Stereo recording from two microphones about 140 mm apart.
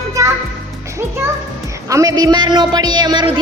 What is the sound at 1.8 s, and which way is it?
Speech, 25° right (ahead or behind).